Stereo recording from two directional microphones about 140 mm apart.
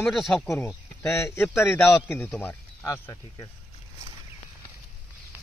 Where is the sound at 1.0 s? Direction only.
20° left (ahead or behind).